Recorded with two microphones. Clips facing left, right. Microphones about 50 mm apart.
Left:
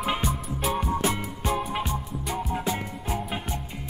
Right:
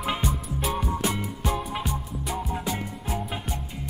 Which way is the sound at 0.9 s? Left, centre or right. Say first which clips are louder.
Left 1 dB; centre.